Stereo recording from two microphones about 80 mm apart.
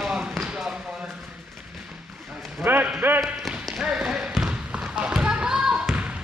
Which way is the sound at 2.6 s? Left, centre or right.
Right.